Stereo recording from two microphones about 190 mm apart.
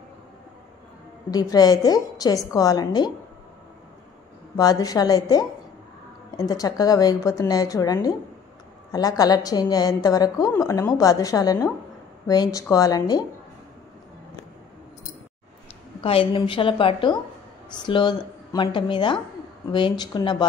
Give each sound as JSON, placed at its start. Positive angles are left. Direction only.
{"t": 1.3, "sound": "a woman's voice", "side_deg": 20}
{"t": 4.6, "sound": "a woman's voice", "side_deg": 20}
{"t": 16.0, "sound": "a woman's voice", "side_deg": 30}